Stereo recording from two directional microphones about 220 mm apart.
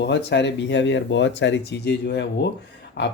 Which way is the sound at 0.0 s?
50° left (ahead or behind).